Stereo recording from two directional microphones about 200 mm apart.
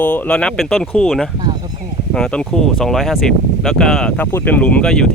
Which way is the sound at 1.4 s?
20° right (ahead or behind).